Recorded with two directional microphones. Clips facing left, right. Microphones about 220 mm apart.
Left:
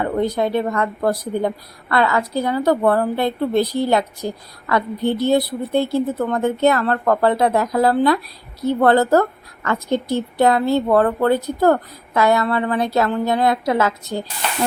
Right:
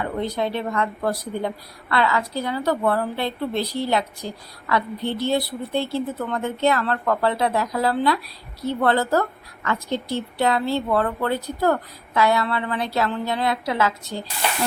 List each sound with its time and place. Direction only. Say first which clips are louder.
0.0 s speech: left 5 dB; 45° left (ahead or behind)